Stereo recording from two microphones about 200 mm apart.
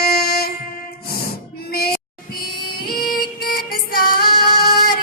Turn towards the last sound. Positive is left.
turn(degrees=45)  # may be behind; listen again after turning